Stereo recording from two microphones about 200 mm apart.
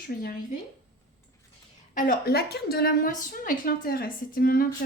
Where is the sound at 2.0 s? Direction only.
45° left (ahead or behind).